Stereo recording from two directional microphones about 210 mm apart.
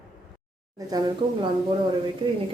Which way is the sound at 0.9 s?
20° right (ahead or behind).